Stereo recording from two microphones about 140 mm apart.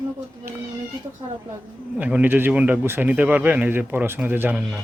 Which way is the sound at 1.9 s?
10° right (ahead or behind).